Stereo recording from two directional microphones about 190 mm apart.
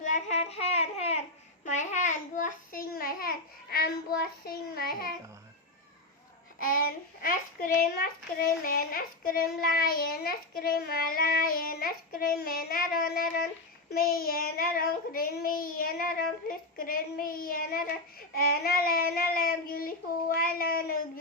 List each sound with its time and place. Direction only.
0.0 s a sound: 40° left (ahead or behind)
1.6 s a child's voice: 40° left (ahead or behind)
6.6 s child singing: 45° left (ahead or behind)